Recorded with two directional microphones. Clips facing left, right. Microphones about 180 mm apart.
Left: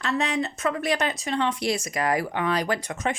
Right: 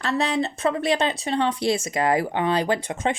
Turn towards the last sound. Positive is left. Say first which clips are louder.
# right 3 dB
turn(degrees=-30)  # may be behind; listen again after turning